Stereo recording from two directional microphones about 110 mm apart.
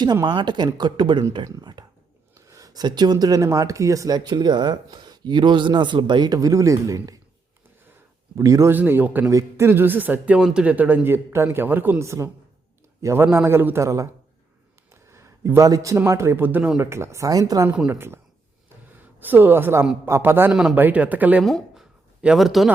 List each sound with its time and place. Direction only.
0.0 s speech: 40° right (ahead or behind)
8.4 s a man's voice: 30° right (ahead or behind)
8.7 s a man's voice: 15° right (ahead or behind)
15.1 s a man's voice: 25° right (ahead or behind)
16.9 s a man's voice: 25° right (ahead or behind)
17.7 s speech: 10° right (ahead or behind)
19.2 s a man's voice: 15° right (ahead or behind)
20.5 s a man's voice: 5° right (ahead or behind)
20.7 s speech: 15° right (ahead or behind)
21.4 s a man's voice: centre (ahead or behind)